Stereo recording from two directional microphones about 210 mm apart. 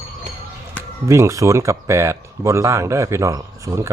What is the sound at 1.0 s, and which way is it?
Speech, 15° right (ahead or behind).